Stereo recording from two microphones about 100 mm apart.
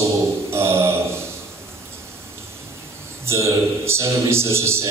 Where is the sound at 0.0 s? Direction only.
25° right (ahead or behind).